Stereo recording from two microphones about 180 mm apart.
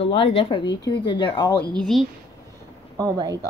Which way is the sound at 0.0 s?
30° left (ahead or behind).